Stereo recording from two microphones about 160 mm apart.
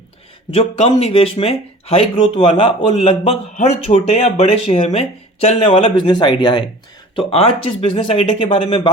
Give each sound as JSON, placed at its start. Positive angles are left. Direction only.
{"t": 0.5, "sound": "speech", "side_deg": 40}